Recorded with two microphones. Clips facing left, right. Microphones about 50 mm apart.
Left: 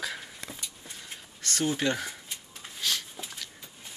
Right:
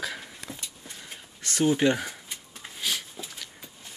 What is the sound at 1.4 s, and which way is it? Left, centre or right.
Speech, centre.